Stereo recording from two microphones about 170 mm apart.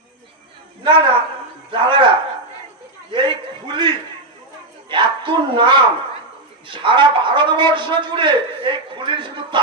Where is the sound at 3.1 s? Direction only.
25° right (ahead or behind).